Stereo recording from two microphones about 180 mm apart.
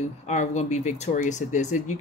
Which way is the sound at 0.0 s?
40° left (ahead or behind).